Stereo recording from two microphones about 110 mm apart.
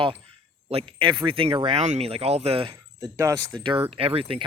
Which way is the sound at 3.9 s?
60° right (ahead or behind).